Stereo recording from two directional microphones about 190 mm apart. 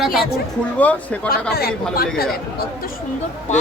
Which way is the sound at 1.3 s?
55° left (ahead or behind).